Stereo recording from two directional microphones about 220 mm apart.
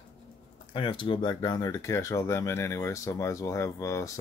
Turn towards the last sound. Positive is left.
turn(degrees=15)  # may be behind; listen again after turning